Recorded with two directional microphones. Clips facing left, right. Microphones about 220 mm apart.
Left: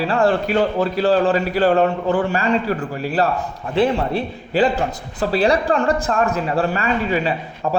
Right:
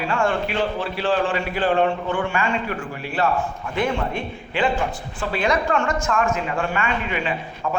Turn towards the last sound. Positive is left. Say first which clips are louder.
# left 4 dB
turn(degrees=35)  # may be behind; listen again after turning